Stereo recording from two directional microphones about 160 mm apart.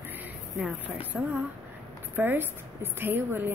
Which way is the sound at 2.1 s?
15° right (ahead or behind).